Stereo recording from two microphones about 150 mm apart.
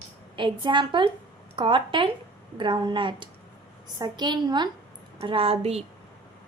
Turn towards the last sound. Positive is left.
turn(degrees=-40)  # may be behind; listen again after turning